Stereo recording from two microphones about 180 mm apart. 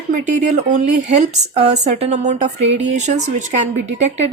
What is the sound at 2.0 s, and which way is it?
Speech, 35° right (ahead or behind).